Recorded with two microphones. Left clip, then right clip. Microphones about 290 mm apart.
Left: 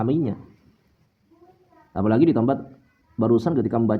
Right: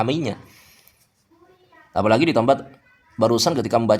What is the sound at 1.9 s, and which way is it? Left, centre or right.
Speech, right.